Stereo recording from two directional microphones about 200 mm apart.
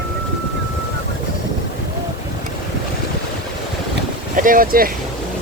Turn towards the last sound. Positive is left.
turn(degrees=-45)  # may be behind; listen again after turning